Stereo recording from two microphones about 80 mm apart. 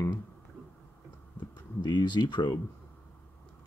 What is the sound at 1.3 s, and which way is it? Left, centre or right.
Speech, left.